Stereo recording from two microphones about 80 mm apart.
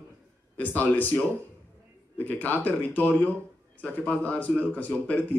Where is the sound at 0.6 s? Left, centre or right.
Left.